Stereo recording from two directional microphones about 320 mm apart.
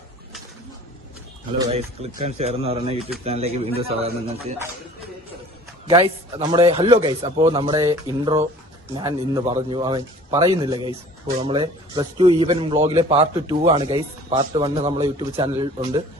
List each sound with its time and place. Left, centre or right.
1.5 s speech: centre
5.9 s speech: centre